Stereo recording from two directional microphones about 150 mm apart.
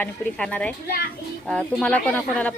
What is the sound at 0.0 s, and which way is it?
A woman's voice, 10° left (ahead or behind).